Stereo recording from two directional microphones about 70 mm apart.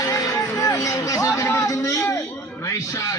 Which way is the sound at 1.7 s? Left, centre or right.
Left.